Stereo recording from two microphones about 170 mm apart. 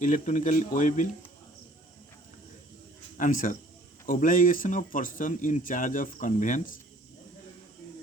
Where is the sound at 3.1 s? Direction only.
50° left (ahead or behind).